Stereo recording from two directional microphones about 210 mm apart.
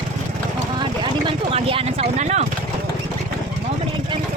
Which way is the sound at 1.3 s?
25° right (ahead or behind).